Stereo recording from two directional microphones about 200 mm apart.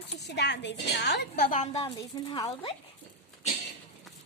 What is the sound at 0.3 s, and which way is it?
A woman's voice, 60° left (ahead or behind).